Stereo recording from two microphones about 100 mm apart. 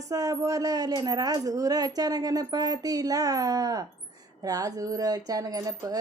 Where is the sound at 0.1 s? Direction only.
35° right (ahead or behind).